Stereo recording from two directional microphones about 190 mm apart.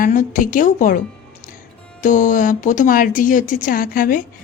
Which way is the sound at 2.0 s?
40° left (ahead or behind).